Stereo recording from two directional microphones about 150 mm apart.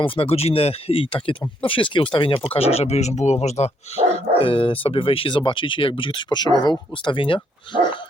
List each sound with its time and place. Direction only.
0.0 s speech: 40° left (ahead or behind)